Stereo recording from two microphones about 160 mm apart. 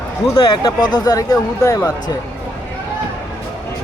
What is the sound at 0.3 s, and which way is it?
Speech, 30° left (ahead or behind).